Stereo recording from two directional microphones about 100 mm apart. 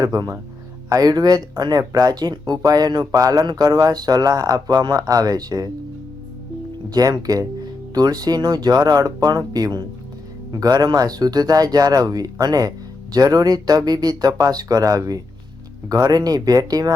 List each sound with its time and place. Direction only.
0.0 s speech: 40° right (ahead or behind)
6.9 s speech: 40° right (ahead or behind)